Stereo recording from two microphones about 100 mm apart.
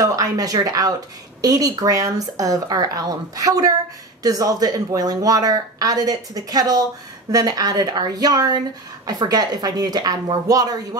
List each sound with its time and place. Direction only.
0.0 s a woman's voice: 35° right (ahead or behind)